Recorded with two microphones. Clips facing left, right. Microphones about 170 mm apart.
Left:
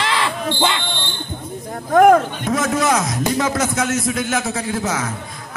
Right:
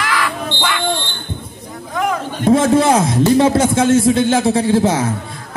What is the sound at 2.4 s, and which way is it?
A man's voice, 30° right (ahead or behind).